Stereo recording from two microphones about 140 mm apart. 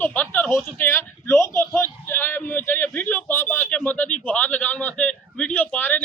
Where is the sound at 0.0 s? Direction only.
10° left (ahead or behind).